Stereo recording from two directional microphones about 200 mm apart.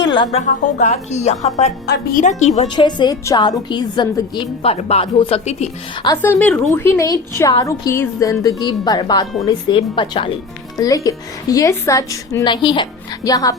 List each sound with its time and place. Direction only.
0.0 s a sound: 25° left (ahead or behind)
0.4 s speech: 35° left (ahead or behind)
1.9 s speech: 45° left (ahead or behind)
2.6 s speech: 20° left (ahead or behind)
6.1 s speech: 10° left (ahead or behind)